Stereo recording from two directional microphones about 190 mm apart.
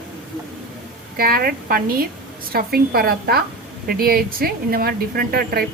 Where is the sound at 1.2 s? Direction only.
50° right (ahead or behind).